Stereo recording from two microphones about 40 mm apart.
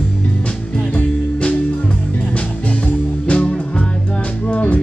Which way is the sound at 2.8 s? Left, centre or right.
Left.